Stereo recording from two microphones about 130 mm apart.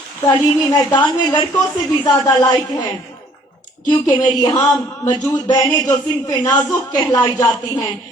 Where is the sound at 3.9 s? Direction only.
35° left (ahead or behind).